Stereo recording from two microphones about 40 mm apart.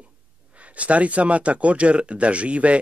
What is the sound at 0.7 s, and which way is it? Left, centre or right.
Speech, right.